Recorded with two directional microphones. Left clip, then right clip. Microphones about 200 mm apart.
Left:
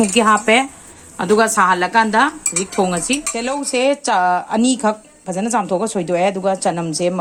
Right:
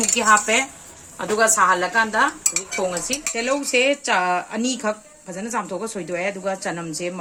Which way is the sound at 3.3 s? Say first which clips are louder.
Right 4 dB; 30° left (ahead or behind).